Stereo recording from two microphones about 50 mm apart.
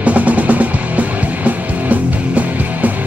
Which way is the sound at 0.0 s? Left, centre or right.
Right.